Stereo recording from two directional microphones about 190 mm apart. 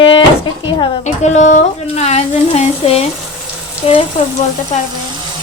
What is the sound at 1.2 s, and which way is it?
A woman's voice, 40° left (ahead or behind).